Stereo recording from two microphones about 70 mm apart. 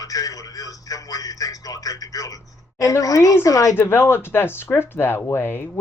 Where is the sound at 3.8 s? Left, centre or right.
Left.